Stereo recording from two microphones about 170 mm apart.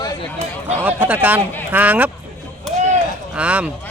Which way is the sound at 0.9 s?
10° right (ahead or behind).